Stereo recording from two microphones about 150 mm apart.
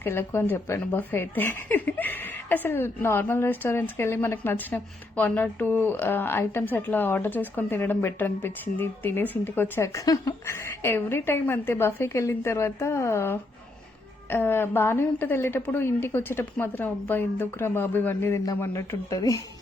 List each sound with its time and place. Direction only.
0.0 s a woman's voice: 15° left (ahead or behind)